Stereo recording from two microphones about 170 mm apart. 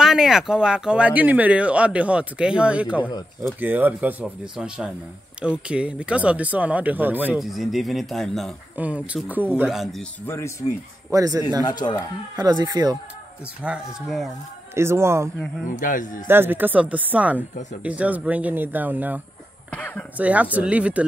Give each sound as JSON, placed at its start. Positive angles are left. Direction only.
{"t": 0.0, "sound": "speech", "side_deg": -5}
{"t": 10.2, "sound": "speech", "side_deg": 15}
{"t": 11.1, "sound": "speech", "side_deg": -20}
{"t": 11.8, "sound": "speech", "side_deg": 25}
{"t": 12.4, "sound": "speech", "side_deg": -25}
{"t": 13.6, "sound": "speech", "side_deg": -5}
{"t": 14.7, "sound": "speech", "side_deg": -15}
{"t": 15.7, "sound": "speech", "side_deg": 50}
{"t": 16.3, "sound": "speech", "side_deg": -10}
{"t": 19.7, "sound": "speech", "side_deg": 10}
{"t": 20.2, "sound": "speech", "side_deg": -10}